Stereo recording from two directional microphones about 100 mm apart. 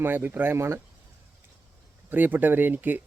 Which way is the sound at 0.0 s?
20° right (ahead or behind).